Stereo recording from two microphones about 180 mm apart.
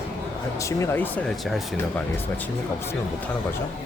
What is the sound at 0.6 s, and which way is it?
Speech, 15° left (ahead or behind).